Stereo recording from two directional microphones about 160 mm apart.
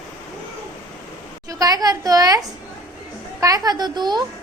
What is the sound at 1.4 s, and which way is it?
A woman's voice, 25° right (ahead or behind).